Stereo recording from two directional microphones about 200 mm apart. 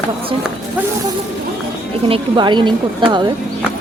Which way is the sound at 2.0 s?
25° right (ahead or behind).